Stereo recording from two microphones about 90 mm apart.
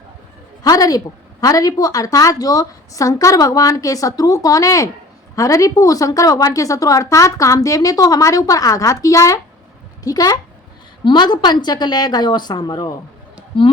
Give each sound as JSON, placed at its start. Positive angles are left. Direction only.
{"t": 0.6, "sound": "a woman's voice", "side_deg": 45}